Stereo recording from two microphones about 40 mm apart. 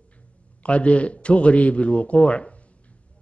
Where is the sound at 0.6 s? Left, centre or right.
Left.